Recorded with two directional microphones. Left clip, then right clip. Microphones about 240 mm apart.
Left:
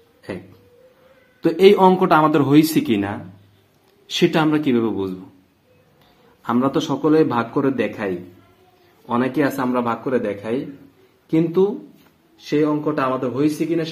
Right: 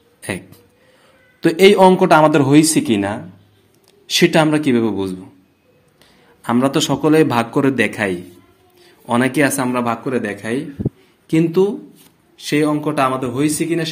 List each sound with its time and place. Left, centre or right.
1.4 s speech: right
6.4 s a man's voice: right